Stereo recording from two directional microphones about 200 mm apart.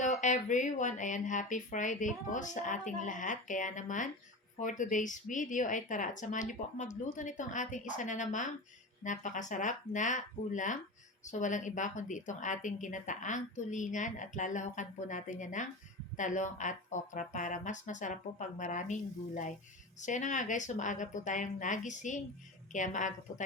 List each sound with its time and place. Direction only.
0.0 s a woman's voice: 35° left (ahead or behind)